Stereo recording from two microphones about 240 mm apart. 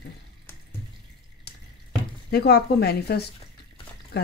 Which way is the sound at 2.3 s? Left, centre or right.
Left.